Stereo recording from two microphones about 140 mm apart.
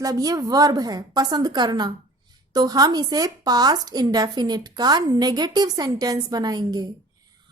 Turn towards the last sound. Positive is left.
turn(degrees=-30)  # may be behind; listen again after turning